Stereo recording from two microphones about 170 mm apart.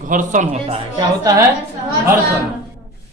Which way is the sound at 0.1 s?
50° right (ahead or behind).